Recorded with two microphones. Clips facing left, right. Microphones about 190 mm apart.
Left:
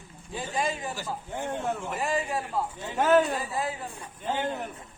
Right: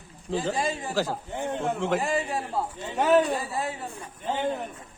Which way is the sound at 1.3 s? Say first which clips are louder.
Right 2 dB; 10° right (ahead or behind).